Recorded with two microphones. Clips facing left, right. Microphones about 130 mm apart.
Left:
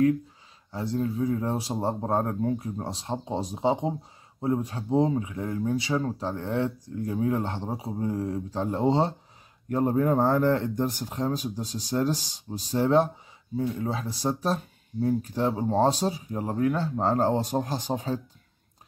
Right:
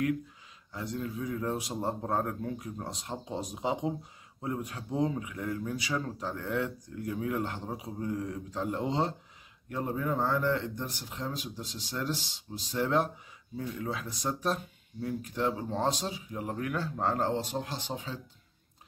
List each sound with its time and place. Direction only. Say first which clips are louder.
0.7 s speech: left 8 dB; 30° left (ahead or behind)
9.7 s speech: left 9 dB; 45° left (ahead or behind)